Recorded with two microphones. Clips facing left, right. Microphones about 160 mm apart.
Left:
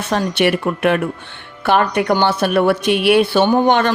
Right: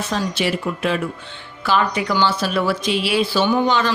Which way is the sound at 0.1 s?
65° left (ahead or behind).